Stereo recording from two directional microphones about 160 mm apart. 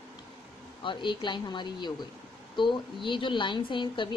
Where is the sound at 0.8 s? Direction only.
30° left (ahead or behind).